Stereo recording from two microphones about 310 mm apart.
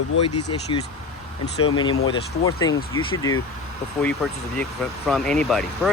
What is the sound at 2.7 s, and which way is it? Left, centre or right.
Speech, left.